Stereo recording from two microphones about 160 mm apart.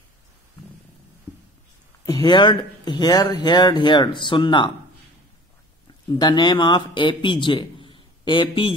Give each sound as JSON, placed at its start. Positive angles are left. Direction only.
{"t": 2.0, "sound": "speech", "side_deg": 25}
{"t": 6.1, "sound": "a man's voice", "side_deg": 25}